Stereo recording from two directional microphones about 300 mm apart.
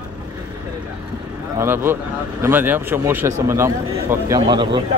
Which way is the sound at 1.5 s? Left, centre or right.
Centre.